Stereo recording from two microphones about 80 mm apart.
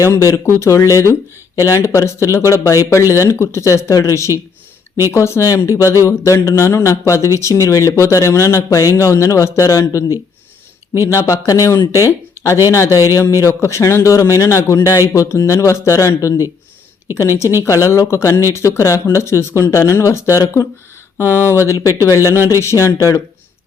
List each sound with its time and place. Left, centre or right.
0.0 s speech: left
21.2 s speech: right
22.0 s speech: left